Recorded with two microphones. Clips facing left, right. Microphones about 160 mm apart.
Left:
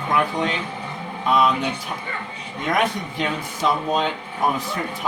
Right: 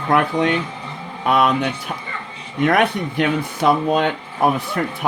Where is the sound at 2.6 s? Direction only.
60° right (ahead or behind).